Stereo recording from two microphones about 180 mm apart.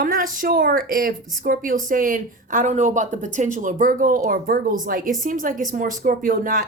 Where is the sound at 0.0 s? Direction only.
50° right (ahead or behind).